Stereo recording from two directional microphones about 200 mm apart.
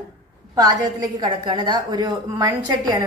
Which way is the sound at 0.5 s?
20° right (ahead or behind).